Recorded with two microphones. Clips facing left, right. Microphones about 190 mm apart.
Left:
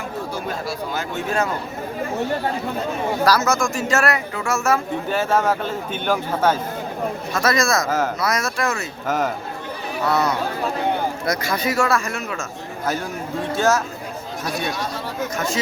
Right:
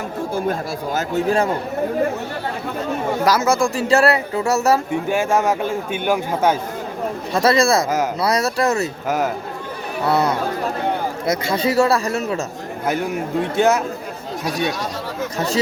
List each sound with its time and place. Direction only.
0.9 s speech: 35° right (ahead or behind)
3.2 s speech: 25° right (ahead or behind)
5.0 s speech: 10° right (ahead or behind)
7.3 s speech: 30° right (ahead or behind)
7.9 s speech: 15° right (ahead or behind)
8.2 s speech: 35° right (ahead or behind)
9.0 s speech: 10° right (ahead or behind)
10.1 s speech: 30° right (ahead or behind)